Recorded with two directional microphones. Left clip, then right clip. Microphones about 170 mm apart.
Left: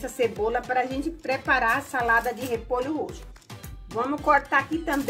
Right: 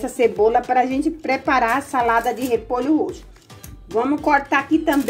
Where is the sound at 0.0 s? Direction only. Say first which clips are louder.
Right 9 dB; 20° right (ahead or behind).